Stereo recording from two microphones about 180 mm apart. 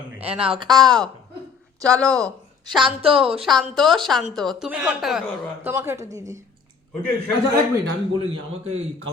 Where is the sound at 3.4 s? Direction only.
Centre (ahead or behind).